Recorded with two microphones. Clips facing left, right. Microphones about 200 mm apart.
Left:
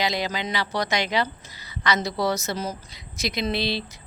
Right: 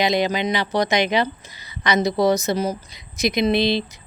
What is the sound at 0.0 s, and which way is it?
A woman's voice, 20° right (ahead or behind).